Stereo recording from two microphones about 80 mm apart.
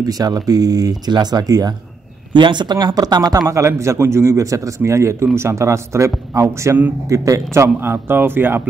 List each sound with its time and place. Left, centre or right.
0.0 s speech: right
2.3 s a man's voice: right